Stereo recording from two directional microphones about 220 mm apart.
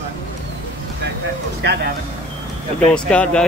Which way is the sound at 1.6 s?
45° right (ahead or behind).